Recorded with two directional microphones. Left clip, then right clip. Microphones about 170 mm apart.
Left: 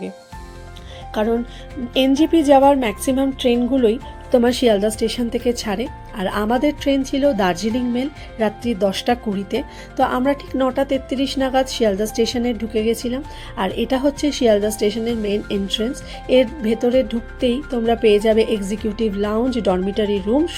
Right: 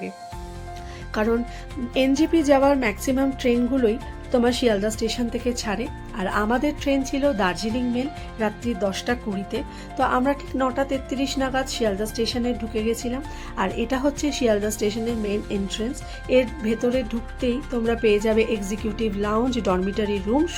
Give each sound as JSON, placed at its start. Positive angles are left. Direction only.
{"t": 1.1, "sound": "speech", "side_deg": 5}